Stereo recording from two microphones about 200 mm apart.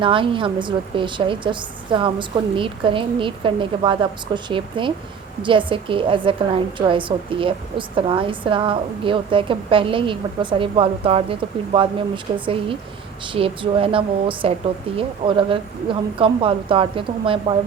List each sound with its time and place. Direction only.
0.0 s a woman's voice: 25° right (ahead or behind)